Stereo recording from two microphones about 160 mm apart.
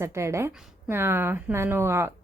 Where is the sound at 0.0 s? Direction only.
15° right (ahead or behind).